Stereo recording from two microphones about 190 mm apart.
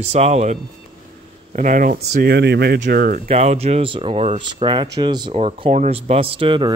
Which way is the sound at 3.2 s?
35° right (ahead or behind).